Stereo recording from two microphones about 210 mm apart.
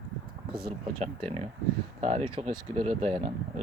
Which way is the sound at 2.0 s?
30° right (ahead or behind).